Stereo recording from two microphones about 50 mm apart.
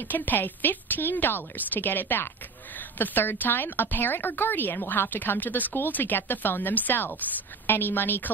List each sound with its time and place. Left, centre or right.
0.1 s a woman's voice: left